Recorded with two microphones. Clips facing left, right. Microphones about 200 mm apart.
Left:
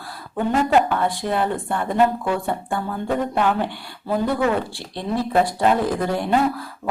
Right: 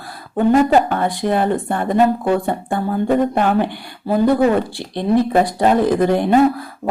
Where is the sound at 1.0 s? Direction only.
15° right (ahead or behind).